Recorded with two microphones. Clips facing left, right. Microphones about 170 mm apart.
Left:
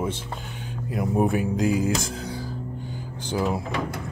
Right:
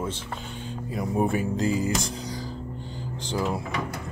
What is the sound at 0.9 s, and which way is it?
Speech, centre (ahead or behind).